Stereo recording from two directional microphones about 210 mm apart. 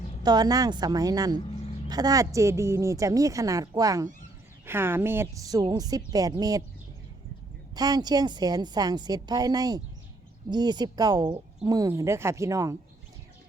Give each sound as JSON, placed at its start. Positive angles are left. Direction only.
{"t": 0.2, "sound": "a woman's voice", "side_deg": -20}
{"t": 7.8, "sound": "a woman's voice", "side_deg": -20}